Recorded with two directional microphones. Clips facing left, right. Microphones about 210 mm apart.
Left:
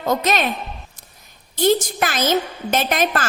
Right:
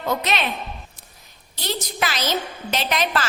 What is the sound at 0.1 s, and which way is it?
Speech, 45° left (ahead or behind).